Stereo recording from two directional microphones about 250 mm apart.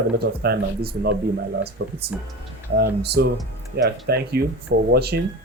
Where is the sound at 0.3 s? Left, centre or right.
Right.